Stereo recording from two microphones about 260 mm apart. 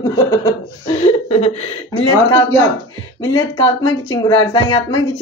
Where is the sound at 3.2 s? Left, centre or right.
Centre.